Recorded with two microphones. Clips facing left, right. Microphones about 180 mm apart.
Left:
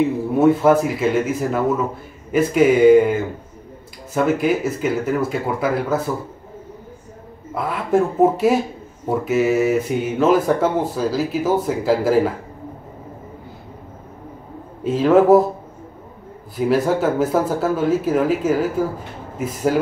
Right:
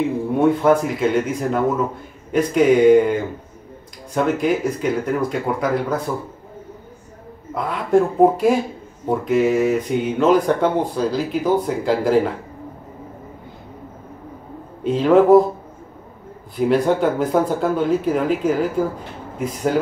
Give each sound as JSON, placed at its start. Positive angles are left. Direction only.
{"t": 0.4, "sound": "speech", "side_deg": 5}
{"t": 7.5, "sound": "speech", "side_deg": 5}
{"t": 14.8, "sound": "speech", "side_deg": 5}
{"t": 16.5, "sound": "speech", "side_deg": 0}